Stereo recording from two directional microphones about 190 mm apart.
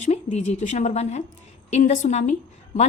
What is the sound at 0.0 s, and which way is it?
A woman's voice, 35° left (ahead or behind).